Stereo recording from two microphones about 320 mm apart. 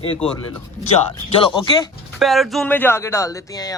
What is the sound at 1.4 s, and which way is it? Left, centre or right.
Speech, centre.